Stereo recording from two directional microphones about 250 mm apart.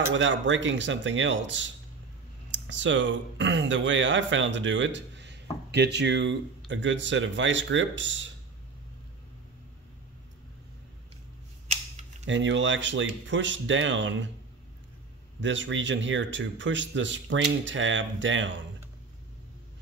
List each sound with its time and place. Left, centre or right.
0.1 s speech: right
11.6 s a sound: right
12.3 s speech: right
15.4 s speech: right